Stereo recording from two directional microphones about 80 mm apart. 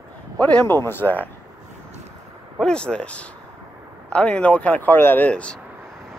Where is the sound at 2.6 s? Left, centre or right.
Centre; by 5.3 s left.